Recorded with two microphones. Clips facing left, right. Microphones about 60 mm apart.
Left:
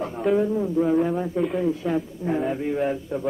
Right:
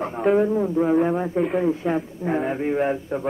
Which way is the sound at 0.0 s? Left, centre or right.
Right.